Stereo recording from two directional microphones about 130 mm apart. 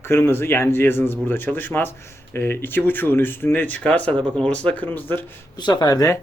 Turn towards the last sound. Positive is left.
turn(degrees=30)  # may be behind; listen again after turning